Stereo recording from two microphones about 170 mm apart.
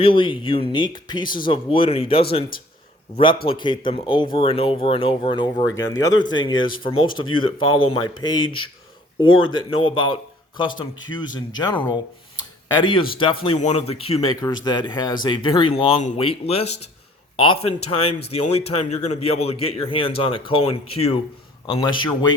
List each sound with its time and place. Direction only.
0.0 s speech: 30° left (ahead or behind)
3.4 s speech: 30° left (ahead or behind)
12.8 s speech: 30° left (ahead or behind)
14.4 s speech: 25° left (ahead or behind)